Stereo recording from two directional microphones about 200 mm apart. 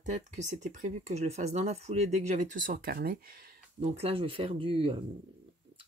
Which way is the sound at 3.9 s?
30° right (ahead or behind).